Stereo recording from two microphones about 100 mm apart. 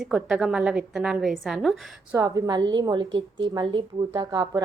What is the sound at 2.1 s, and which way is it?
A woman's voice, 35° right (ahead or behind).